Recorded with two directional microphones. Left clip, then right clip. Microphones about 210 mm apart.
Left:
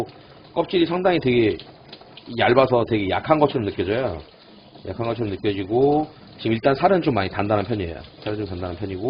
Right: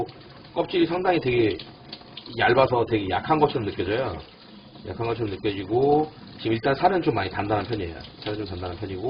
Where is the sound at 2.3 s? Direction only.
50° left (ahead or behind).